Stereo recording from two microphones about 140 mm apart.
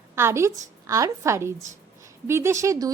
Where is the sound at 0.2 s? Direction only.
20° right (ahead or behind).